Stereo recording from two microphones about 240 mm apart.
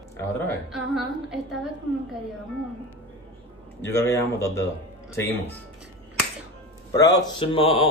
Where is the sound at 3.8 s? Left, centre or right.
Centre.